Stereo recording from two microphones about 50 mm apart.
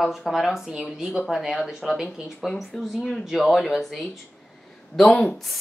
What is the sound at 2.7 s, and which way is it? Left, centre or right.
A woman's voice, centre.